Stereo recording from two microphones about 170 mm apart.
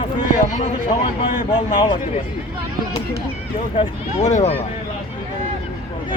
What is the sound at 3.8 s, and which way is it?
Speech, 45° left (ahead or behind).